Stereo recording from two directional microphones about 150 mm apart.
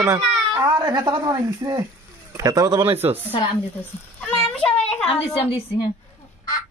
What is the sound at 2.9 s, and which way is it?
Speech, 15° right (ahead or behind).